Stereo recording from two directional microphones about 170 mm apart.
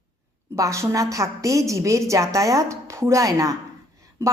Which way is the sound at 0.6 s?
20° right (ahead or behind).